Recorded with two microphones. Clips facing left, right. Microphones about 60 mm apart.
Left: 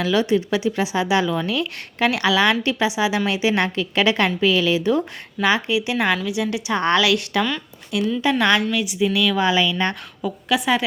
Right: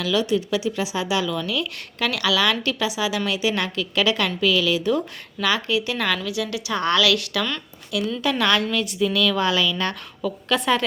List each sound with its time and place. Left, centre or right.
0.0 s a woman's voice: left
10.2 s a woman's voice: centre